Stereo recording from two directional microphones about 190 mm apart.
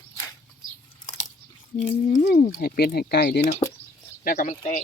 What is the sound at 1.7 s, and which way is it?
Speech, 40° left (ahead or behind).